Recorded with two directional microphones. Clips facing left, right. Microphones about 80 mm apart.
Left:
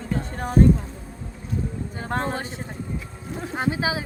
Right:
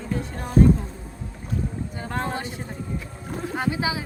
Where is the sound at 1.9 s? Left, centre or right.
Left.